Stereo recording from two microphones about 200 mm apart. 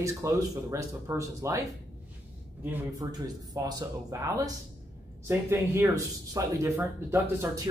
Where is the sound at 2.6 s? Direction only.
10° right (ahead or behind).